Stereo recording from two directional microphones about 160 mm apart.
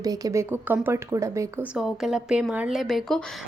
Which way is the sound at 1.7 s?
5° right (ahead or behind).